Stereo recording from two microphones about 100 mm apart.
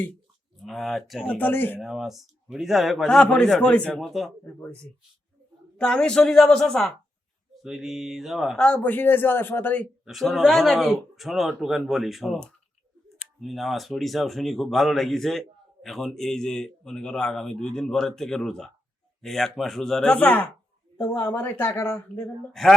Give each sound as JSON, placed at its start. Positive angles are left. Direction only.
{"t": 0.6, "sound": "speech", "side_deg": 0}
{"t": 1.4, "sound": "speech", "side_deg": 20}
{"t": 1.8, "sound": "a woman's voice", "side_deg": -5}
{"t": 8.6, "sound": "speech", "side_deg": 15}
{"t": 10.1, "sound": "speech", "side_deg": 0}
{"t": 13.4, "sound": "speech", "side_deg": 0}